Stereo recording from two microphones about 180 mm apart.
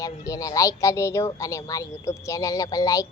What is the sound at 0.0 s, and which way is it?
A woman's voice, 20° left (ahead or behind).